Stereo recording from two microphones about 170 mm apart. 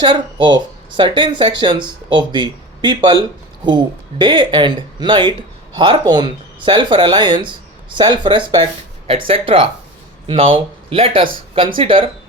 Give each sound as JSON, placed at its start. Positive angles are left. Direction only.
{"t": 0.0, "sound": "speech", "side_deg": -25}
{"t": 4.2, "sound": "speech", "side_deg": -25}